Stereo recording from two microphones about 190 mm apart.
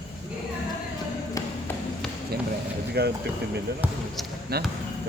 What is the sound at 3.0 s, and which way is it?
Speech, 55° right (ahead or behind).